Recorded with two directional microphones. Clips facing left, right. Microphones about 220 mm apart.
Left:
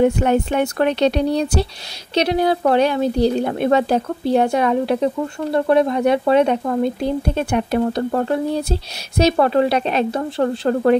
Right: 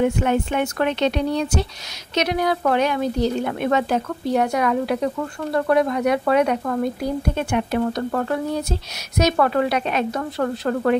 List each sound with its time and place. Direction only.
0.0 s speech: 35° left (ahead or behind)